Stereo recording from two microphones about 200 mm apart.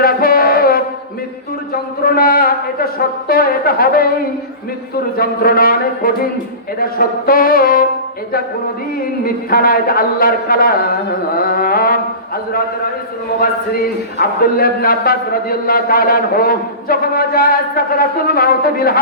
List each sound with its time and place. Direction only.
0.0 s mantra: 45° left (ahead or behind)
1.7 s a sound: 50° left (ahead or behind)
3.2 s a man's voice: 45° left (ahead or behind)
5.1 s a man's voice: 50° left (ahead or behind)
7.3 s a man's voice: 45° left (ahead or behind)
9.2 s a man's voice: 45° left (ahead or behind)
14.2 s a man's voice: 45° left (ahead or behind)